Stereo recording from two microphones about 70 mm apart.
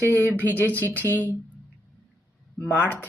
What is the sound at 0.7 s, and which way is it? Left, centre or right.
Speech, right.